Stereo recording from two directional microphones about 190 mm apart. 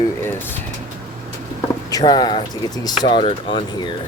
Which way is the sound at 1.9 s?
20° left (ahead or behind).